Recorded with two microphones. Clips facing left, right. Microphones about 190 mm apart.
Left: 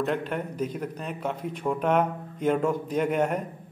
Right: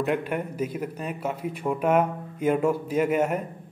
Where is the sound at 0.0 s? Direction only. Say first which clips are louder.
Right 2 dB; 10° right (ahead or behind).